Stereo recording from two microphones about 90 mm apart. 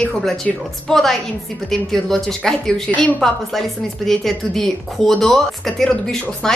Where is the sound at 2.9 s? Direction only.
15° left (ahead or behind).